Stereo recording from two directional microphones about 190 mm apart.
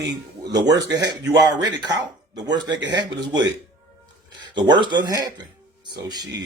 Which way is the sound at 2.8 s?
70° right (ahead or behind).